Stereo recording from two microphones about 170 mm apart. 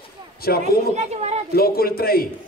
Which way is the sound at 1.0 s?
40° right (ahead or behind).